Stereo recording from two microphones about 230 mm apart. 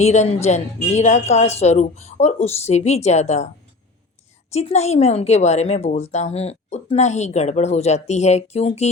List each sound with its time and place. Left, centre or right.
0.0 s a woman's voice: left
4.5 s a woman's voice: left